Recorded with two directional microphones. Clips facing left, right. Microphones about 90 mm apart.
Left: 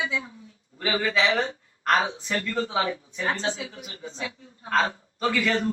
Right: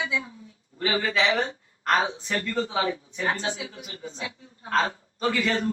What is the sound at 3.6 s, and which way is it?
A woman's voice, 25° left (ahead or behind).